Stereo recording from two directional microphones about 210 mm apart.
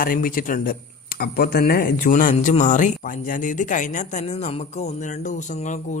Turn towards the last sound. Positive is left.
turn(degrees=35)  # may be behind; listen again after turning